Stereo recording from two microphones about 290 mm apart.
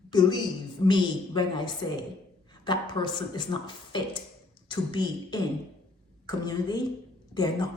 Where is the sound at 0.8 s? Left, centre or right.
Centre.